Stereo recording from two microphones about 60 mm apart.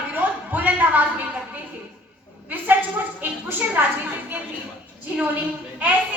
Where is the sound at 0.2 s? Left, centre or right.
Right.